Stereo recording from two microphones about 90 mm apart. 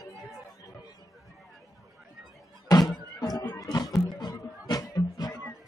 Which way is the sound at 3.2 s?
45° left (ahead or behind).